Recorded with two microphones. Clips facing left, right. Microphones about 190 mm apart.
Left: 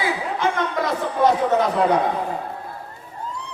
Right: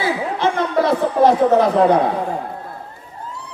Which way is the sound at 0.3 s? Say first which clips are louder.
Right 5 dB; 35° right (ahead or behind).